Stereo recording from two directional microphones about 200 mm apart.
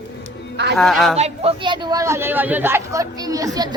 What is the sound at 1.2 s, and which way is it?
Speech, 30° right (ahead or behind).